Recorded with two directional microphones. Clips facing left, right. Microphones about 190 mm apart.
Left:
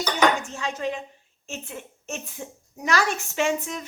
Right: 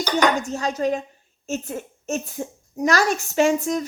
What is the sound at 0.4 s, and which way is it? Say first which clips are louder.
A child's voice: right 6 dB; 40° right (ahead or behind).